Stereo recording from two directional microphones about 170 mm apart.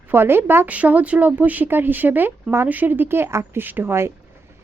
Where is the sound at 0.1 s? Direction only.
15° right (ahead or behind).